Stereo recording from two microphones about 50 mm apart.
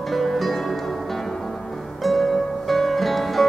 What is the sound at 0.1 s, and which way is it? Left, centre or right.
Music, centre.